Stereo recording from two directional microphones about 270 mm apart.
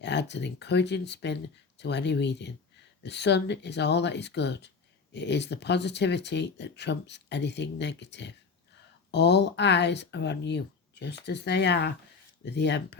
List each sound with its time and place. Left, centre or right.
0.0 s speech: left